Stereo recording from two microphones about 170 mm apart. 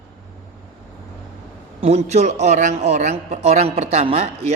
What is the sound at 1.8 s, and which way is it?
A man's voice, 40° right (ahead or behind).